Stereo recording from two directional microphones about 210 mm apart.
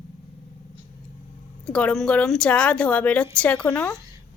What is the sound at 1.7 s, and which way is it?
Speech, 5° left (ahead or behind).